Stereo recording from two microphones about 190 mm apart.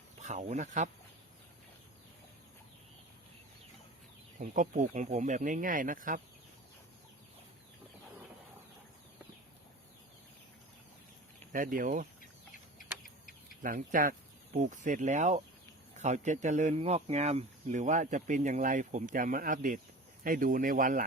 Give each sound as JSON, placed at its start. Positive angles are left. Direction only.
{"t": 0.2, "sound": "speech", "side_deg": -40}
{"t": 4.4, "sound": "speech", "side_deg": -40}
{"t": 11.5, "sound": "speech", "side_deg": -45}
{"t": 13.0, "sound": "a sound", "side_deg": 50}
{"t": 13.6, "sound": "speech", "side_deg": -45}